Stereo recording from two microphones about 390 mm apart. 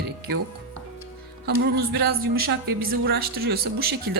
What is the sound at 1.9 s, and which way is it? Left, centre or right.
Speech, right.